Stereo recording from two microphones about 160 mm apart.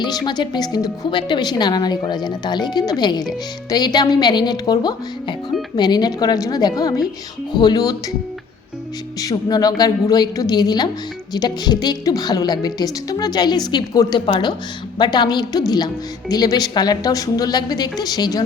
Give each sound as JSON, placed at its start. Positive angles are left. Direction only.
{"t": 0.3, "sound": "a woman's voice", "side_deg": 25}
{"t": 9.2, "sound": "a woman's voice", "side_deg": 25}